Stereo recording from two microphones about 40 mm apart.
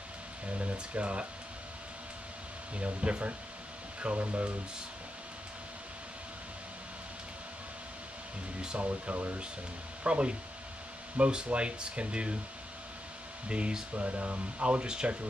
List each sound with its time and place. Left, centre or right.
0.5 s speech: right
2.7 s speech: right
8.7 s speech: right
13.5 s speech: right